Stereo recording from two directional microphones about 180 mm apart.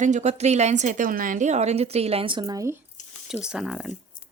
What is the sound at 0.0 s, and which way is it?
A woman's voice, 40° right (ahead or behind).